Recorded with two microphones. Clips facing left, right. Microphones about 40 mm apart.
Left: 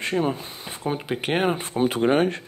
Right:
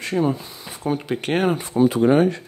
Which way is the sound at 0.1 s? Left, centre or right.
Centre.